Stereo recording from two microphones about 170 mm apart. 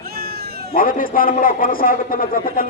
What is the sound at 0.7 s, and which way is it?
A man's voice, 55° left (ahead or behind).